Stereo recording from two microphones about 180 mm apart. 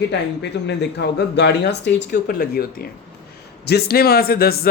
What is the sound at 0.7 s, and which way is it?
Speech, 70° left (ahead or behind).